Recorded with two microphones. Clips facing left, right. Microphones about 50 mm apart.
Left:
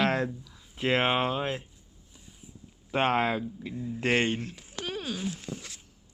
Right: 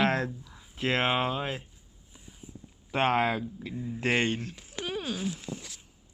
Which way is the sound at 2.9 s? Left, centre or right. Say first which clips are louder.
Even; centre.